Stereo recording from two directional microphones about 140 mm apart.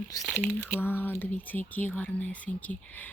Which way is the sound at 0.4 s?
10° left (ahead or behind).